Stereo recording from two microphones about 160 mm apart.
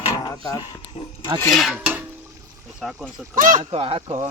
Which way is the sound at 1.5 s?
5° right (ahead or behind).